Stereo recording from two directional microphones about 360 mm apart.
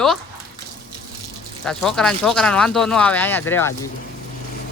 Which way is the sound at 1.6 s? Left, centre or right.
Centre.